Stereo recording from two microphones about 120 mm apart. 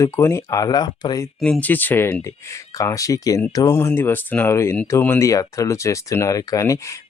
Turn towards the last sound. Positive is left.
turn(degrees=30)  # may be behind; listen again after turning